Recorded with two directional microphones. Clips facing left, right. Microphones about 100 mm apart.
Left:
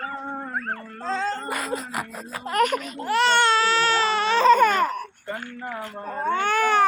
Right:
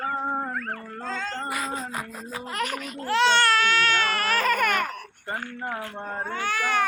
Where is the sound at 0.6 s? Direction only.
35° left (ahead or behind).